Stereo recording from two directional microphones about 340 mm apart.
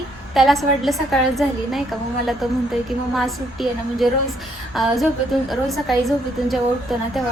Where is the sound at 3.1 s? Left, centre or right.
Centre.